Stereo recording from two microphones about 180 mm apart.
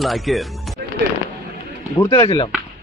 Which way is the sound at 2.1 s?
30° left (ahead or behind).